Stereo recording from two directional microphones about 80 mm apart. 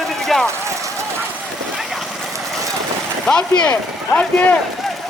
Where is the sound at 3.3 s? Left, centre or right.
Centre.